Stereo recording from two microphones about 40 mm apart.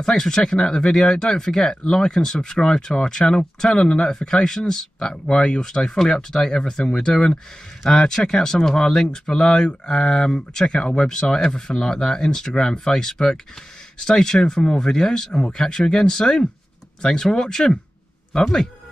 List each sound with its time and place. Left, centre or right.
0.0 s speech: centre